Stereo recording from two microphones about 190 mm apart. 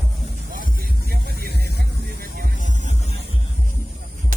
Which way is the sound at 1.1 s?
55° right (ahead or behind).